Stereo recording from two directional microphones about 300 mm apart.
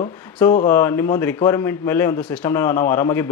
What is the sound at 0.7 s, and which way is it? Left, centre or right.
Speech, centre.